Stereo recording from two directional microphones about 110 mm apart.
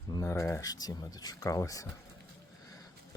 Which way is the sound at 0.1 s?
30° left (ahead or behind).